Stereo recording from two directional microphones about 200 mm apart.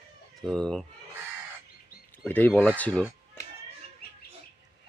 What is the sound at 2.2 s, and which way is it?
Speech, 10° left (ahead or behind).